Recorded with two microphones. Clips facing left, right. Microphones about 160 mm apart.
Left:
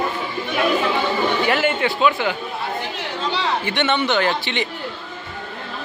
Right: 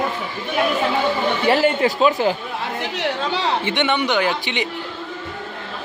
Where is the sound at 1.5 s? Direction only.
35° right (ahead or behind).